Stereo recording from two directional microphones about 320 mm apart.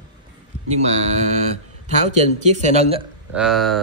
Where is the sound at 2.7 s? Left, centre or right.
Centre.